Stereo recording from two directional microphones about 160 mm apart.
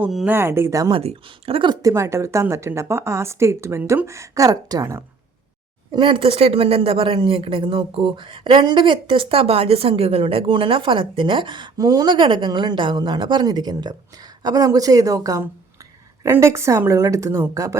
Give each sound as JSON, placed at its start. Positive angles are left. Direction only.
{"t": 0.0, "sound": "speech", "side_deg": 0}
{"t": 0.3, "sound": "speech", "side_deg": -15}
{"t": 0.9, "sound": "speech", "side_deg": -35}